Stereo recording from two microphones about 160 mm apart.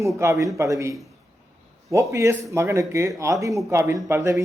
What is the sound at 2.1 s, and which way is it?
Speech, 20° right (ahead or behind).